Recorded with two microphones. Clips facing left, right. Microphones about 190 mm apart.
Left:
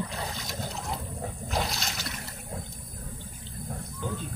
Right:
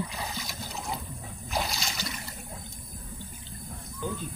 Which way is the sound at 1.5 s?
Centre (ahead or behind).